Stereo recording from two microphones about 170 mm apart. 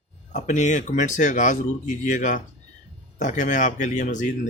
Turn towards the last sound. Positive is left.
turn(degrees=45)  # may be behind; listen again after turning